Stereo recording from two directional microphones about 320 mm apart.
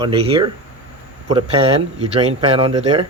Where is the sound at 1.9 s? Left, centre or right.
Centre.